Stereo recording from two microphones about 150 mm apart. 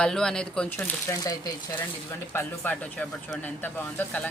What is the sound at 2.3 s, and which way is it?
Speech, 15° left (ahead or behind).